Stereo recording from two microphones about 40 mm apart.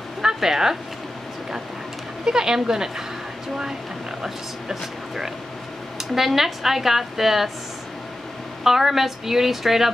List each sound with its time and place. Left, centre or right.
0.2 s a sound: centre
2.2 s speech: centre
4.2 s speech: centre
8.6 s speech: centre